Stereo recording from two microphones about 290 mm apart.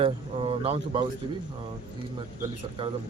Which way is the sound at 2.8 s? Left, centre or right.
Centre.